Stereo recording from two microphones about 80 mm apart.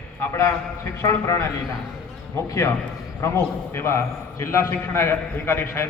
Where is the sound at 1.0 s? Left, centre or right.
Left.